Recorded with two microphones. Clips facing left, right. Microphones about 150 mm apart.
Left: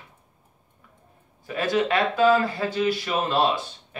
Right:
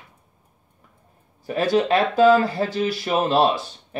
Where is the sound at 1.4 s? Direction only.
35° right (ahead or behind).